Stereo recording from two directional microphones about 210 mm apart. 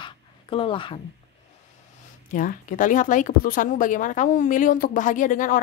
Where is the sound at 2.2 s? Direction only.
40° left (ahead or behind).